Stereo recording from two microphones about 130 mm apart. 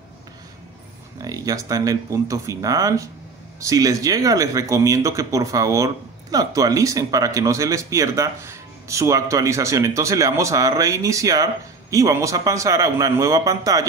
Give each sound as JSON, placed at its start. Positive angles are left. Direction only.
{"t": 1.2, "sound": "speech", "side_deg": -25}